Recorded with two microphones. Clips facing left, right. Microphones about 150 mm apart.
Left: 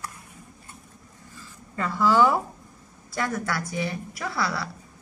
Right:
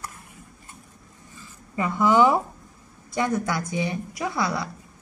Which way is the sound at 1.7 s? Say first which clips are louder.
Right 2 dB; 15° right (ahead or behind).